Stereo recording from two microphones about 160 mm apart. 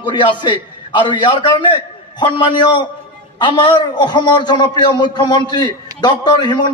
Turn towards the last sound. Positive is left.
turn(degrees=25)  # may be behind; listen again after turning